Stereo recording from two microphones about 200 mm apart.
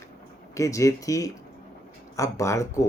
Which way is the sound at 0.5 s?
15° left (ahead or behind).